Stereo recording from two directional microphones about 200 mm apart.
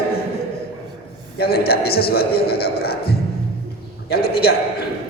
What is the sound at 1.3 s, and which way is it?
A woman's voice, 50° left (ahead or behind).